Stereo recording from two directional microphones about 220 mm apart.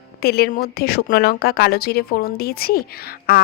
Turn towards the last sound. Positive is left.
turn(degrees=45)  # may be behind; listen again after turning